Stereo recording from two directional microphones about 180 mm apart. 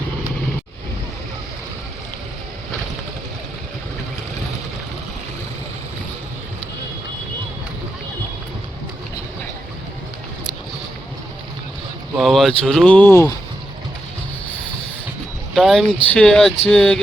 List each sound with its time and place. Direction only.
12.1 s speech: centre (ahead or behind)
15.5 s speech: centre (ahead or behind)